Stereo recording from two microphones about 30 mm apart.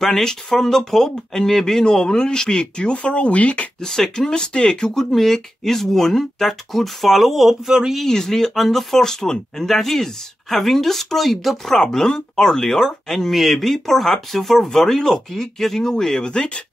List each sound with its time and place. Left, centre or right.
0.0 s speech: centre; by 3.6 s left
4.2 s speech: centre
4.6 s speech: left
4.9 s speech: centre
8.0 s speech: centre
8.5 s speech: centre
9.0 s speech: centre
16.3 s speech: left